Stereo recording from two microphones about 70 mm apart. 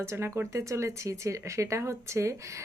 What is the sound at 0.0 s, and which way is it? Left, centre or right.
Speech, right.